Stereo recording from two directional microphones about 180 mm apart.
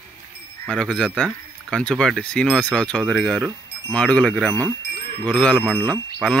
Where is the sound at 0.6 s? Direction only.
5° left (ahead or behind).